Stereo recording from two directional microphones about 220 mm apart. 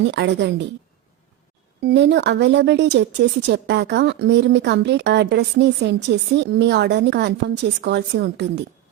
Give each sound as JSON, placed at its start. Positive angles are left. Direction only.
{"t": 0.1, "sound": "speech", "side_deg": -50}
{"t": 1.8, "sound": "speech", "side_deg": -50}